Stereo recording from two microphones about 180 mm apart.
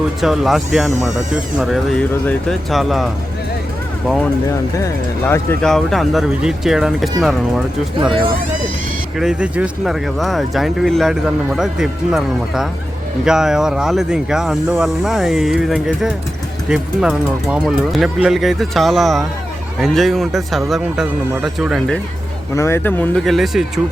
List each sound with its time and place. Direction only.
0.2 s speech: centre (ahead or behind)
4.8 s speech: 15° left (ahead or behind)
5.6 s speech: centre (ahead or behind)
9.1 s speech: 5° right (ahead or behind)
22.5 s speech: 15° left (ahead or behind); by 23.8 s centre (ahead or behind)